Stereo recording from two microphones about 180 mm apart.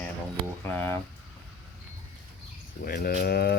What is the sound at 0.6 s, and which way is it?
Speech, 10° left (ahead or behind).